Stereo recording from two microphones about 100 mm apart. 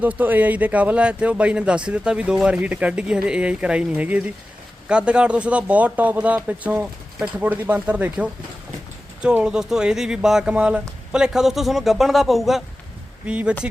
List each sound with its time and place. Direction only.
0.0 s speech: 15° right (ahead or behind)